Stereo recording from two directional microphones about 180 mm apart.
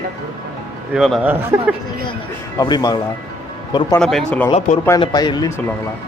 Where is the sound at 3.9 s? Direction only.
5° left (ahead or behind).